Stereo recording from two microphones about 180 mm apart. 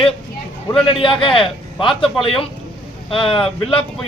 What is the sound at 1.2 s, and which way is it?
Speech, 30° left (ahead or behind).